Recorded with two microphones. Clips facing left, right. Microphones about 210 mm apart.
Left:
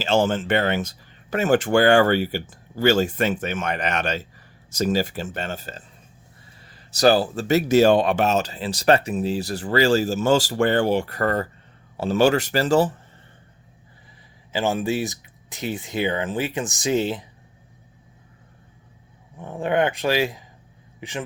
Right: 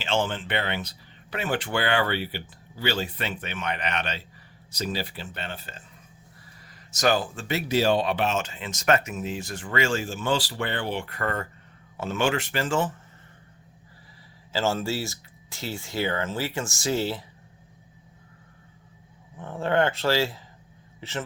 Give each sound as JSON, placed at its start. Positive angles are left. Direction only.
{"t": 0.0, "sound": "speech", "side_deg": 40}
{"t": 6.9, "sound": "speech", "side_deg": 35}
{"t": 14.5, "sound": "speech", "side_deg": 15}
{"t": 19.4, "sound": "speech", "side_deg": 15}